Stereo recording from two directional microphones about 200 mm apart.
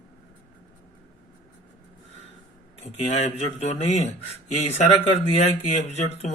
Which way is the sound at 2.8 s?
35° left (ahead or behind).